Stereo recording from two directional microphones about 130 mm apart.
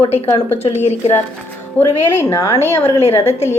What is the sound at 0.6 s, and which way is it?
Speech, 55° left (ahead or behind).